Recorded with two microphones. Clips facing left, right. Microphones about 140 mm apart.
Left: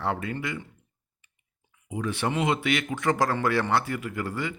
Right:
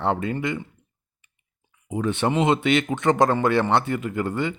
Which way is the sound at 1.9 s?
30° right (ahead or behind).